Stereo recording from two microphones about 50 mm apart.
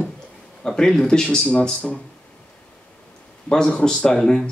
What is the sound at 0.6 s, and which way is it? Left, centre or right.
Speech, centre.